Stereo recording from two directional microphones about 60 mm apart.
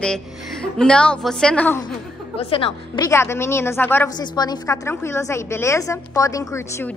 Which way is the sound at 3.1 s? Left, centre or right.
Left.